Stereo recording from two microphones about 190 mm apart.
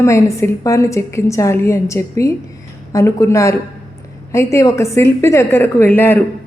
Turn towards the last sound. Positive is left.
turn(degrees=10)  # may be behind; listen again after turning